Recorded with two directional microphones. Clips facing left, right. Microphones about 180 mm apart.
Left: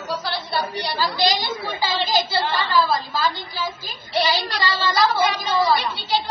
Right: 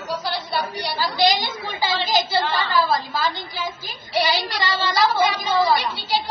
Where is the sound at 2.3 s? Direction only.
20° right (ahead or behind).